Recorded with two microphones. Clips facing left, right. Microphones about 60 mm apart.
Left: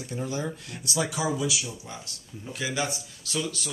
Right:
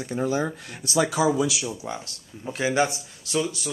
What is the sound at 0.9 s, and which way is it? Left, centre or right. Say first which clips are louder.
Speech: right 7 dB; right.